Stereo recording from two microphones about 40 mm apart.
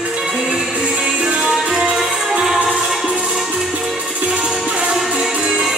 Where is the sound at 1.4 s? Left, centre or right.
Centre.